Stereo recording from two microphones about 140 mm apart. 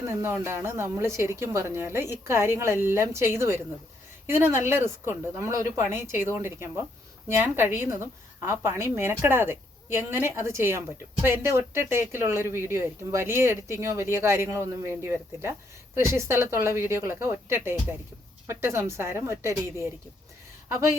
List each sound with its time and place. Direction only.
0.0 s speech: 15° right (ahead or behind)